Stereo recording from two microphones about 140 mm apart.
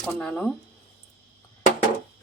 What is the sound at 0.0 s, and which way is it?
Speech, 5° left (ahead or behind).